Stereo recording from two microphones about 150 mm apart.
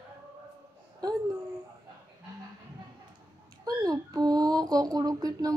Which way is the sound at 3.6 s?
25° right (ahead or behind).